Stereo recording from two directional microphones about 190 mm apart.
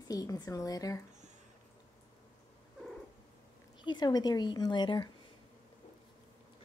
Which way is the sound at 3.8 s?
25° left (ahead or behind).